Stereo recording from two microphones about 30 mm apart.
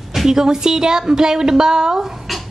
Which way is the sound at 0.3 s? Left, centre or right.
Centre.